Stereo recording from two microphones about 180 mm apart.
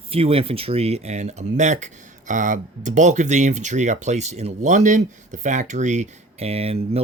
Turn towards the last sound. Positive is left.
turn(degrees=-35)  # may be behind; listen again after turning